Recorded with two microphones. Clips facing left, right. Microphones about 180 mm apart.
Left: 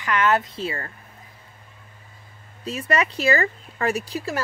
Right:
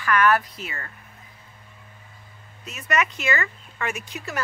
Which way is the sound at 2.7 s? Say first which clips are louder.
Left 2 dB; 30° left (ahead or behind).